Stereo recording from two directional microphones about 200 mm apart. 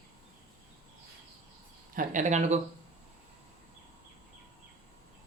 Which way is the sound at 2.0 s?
40° right (ahead or behind).